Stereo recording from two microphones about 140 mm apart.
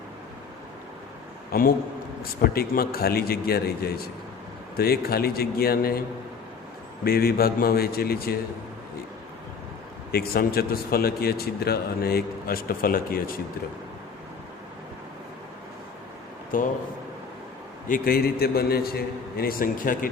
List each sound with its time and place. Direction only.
1.5 s a man's voice: 90° left
7.0 s a man's voice: 90° left
10.1 s a man's voice: 90° left
16.5 s speech: 75° left (ahead or behind)
17.8 s a man's voice: 80° left